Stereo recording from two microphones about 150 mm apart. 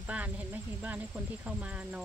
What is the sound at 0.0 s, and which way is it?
Speech, 10° right (ahead or behind).